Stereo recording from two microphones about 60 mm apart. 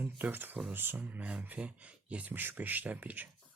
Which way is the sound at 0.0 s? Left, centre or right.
Right.